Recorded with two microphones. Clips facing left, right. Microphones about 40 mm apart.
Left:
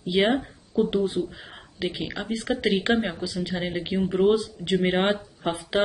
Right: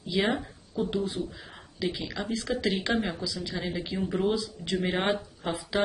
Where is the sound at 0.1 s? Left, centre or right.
Left.